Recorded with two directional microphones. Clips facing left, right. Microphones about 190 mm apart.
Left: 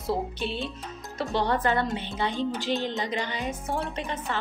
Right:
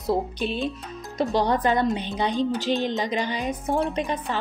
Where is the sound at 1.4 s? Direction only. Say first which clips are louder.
Right 2 dB; 15° right (ahead or behind).